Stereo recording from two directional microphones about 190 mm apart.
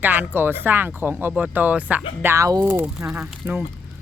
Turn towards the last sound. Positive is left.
turn(degrees=-10)  # may be behind; listen again after turning